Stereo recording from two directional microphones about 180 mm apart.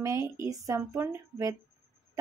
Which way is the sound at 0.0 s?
15° right (ahead or behind).